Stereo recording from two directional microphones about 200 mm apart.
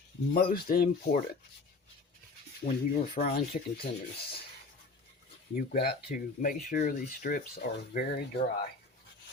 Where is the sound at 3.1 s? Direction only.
50° left (ahead or behind).